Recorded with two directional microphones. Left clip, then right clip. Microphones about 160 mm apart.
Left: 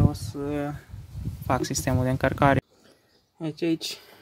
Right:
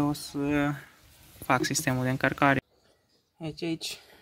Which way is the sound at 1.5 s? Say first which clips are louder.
Even; 15° left (ahead or behind).